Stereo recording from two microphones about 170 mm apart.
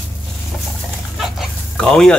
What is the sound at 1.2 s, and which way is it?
Chicken, centre (ahead or behind).